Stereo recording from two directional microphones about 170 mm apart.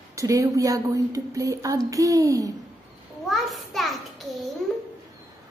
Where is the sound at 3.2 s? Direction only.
Centre (ahead or behind).